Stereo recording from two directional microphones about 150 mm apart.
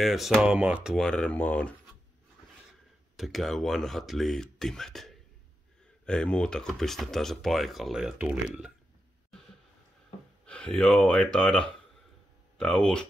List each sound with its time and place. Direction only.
0.0 s speech: centre (ahead or behind)
3.2 s speech: centre (ahead or behind)
10.4 s speech: 5° left (ahead or behind)